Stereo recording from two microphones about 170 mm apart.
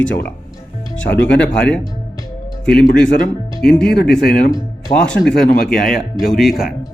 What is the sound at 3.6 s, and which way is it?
Speech, 70° left (ahead or behind).